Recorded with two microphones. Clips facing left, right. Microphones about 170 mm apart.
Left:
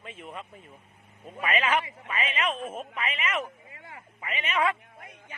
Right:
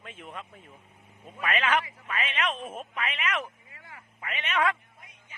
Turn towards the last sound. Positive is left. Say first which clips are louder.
# left 8 dB
turn(degrees=55)  # may be behind; listen again after turning